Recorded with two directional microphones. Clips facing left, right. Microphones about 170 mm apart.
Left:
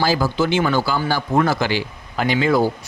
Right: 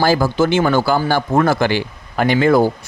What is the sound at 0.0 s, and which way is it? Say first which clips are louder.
A man's voice: right 4 dB; 50° right (ahead or behind).